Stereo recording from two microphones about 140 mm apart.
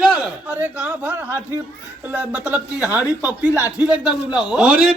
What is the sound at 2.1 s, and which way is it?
A man's voice, 10° right (ahead or behind).